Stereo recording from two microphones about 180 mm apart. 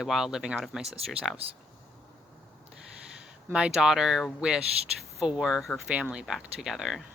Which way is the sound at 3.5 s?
5° right (ahead or behind).